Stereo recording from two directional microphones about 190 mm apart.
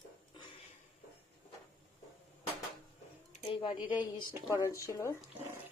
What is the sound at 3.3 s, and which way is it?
Speech, 30° left (ahead or behind).